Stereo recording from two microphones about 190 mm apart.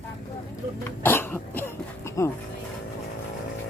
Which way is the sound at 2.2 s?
15° left (ahead or behind).